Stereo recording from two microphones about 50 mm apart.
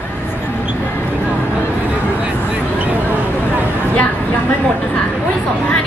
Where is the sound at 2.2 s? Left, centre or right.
Right.